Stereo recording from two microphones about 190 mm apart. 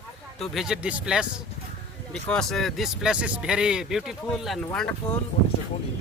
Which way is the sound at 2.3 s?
Centre (ahead or behind).